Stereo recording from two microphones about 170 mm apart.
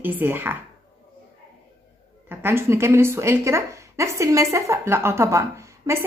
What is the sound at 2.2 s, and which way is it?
A woman's voice, 15° right (ahead or behind).